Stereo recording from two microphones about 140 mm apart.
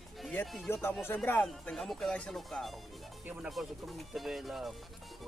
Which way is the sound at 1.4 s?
5° left (ahead or behind).